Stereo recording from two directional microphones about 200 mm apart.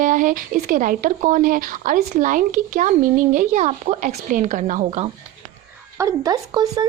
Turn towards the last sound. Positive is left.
turn(degrees=-20)  # may be behind; listen again after turning